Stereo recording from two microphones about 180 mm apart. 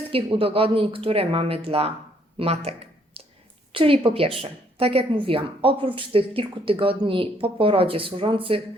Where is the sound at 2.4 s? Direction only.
35° right (ahead or behind).